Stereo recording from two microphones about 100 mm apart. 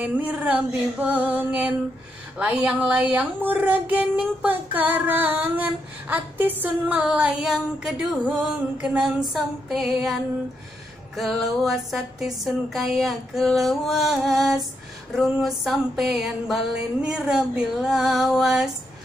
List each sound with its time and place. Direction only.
0.0 s female singing: 15° right (ahead or behind)
8.8 s music: 5° right (ahead or behind)